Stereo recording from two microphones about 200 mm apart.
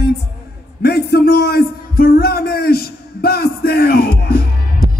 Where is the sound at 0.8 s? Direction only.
50° left (ahead or behind).